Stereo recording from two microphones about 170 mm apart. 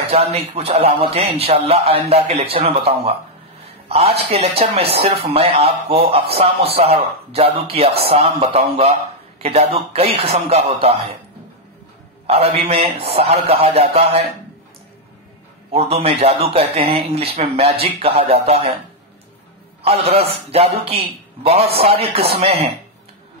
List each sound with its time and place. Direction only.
0.1 s speech: 35° right (ahead or behind)
12.3 s speech: 35° right (ahead or behind)
15.7 s speech: 35° right (ahead or behind)
19.8 s speech: 35° right (ahead or behind)